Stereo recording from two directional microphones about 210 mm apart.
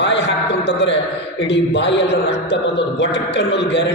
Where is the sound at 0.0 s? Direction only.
55° left (ahead or behind).